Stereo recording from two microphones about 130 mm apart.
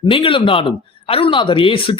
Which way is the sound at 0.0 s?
40° left (ahead or behind).